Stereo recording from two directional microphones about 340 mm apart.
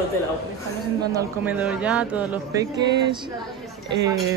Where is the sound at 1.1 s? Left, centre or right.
Centre.